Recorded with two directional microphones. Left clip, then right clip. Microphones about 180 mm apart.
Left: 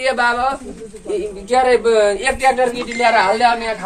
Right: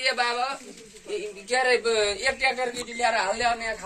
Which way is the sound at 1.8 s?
20° right (ahead or behind).